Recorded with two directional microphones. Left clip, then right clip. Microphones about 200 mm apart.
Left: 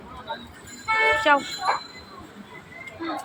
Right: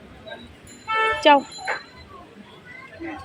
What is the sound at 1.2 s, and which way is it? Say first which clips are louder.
Speech: right 7 dB; 55° right (ahead or behind).